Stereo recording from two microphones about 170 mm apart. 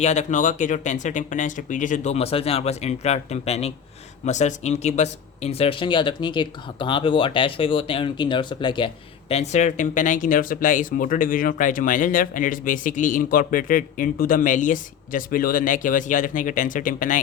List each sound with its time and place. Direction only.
0.0 s speech: 45° left (ahead or behind)
9.3 s speech: 40° left (ahead or behind)